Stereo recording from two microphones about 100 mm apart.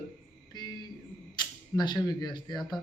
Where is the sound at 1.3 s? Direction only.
50° left (ahead or behind).